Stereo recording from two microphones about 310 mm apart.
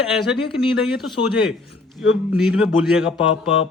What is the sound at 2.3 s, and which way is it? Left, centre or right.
Speech, centre.